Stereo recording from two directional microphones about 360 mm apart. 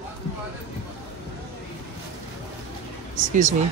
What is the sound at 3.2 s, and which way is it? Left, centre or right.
Speech, right.